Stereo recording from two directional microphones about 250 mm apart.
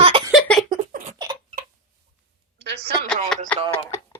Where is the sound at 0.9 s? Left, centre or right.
Right.